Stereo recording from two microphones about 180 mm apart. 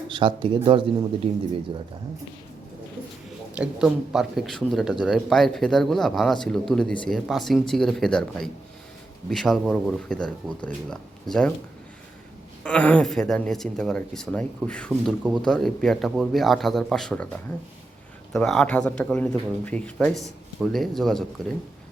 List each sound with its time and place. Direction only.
0.1 s speech: 25° right (ahead or behind)
3.5 s speech: 5° right (ahead or behind)
12.6 s speech: 5° left (ahead or behind)
18.3 s speech: 5° left (ahead or behind)